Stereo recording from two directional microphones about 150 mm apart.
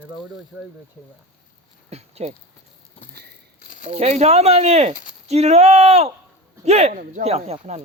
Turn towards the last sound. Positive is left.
turn(degrees=-45)  # may be behind; listen again after turning